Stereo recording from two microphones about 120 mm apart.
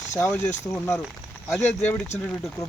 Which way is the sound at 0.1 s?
20° left (ahead or behind).